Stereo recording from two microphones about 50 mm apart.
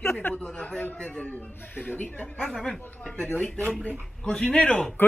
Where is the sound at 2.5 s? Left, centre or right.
Centre.